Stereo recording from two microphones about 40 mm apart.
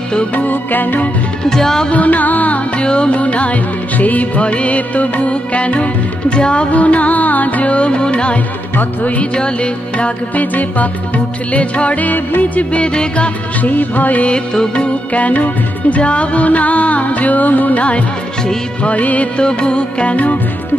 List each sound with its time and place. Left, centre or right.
0.4 s music: left
1.4 s music: centre
1.9 s music: left
2.8 s music: left
6.7 s music: left
10.4 s music: left
12.8 s music: left
13.6 s music: left
14.3 s music: left
15.1 s music: left
19.4 s music: left